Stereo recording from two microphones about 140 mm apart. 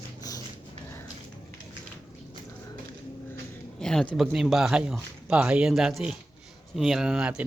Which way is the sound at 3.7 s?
5° left (ahead or behind).